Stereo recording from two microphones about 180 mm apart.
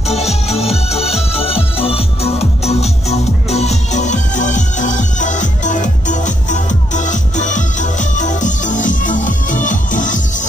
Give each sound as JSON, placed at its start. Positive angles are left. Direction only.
{"t": 0.1, "sound": "music", "side_deg": 35}